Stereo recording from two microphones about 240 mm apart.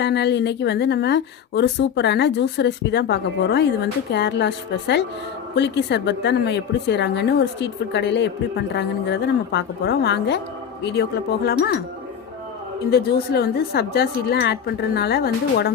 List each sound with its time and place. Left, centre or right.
0.0 s a woman's voice: left
11.4 s a woman's voice: left
12.9 s a woman's voice: left